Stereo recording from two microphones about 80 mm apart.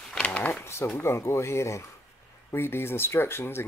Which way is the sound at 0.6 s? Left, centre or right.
Left.